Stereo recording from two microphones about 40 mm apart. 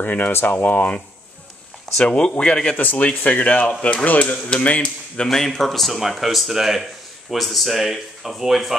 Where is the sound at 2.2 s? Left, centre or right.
Left.